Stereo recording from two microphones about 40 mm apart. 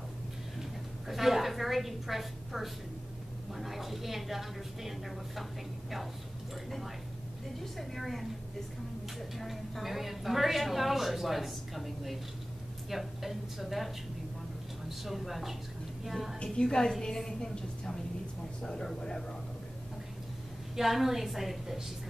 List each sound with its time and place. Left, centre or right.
0.6 s a sound: centre
3.5 s a woman's voice: centre
7.6 s a woman's voice: centre
9.4 s a woman's voice: centre
15.0 s a woman's voice: centre
16.5 s a woman's voice: centre
20.7 s a woman's voice: centre